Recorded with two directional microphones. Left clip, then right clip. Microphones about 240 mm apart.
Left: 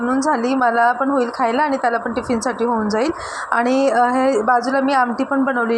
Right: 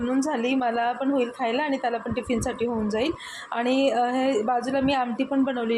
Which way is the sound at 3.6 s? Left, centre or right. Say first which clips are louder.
Left 5 dB; left.